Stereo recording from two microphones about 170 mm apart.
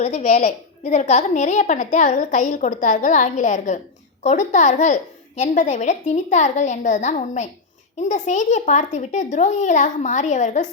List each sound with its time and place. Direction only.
0.0 s a woman's voice: 45° left (ahead or behind)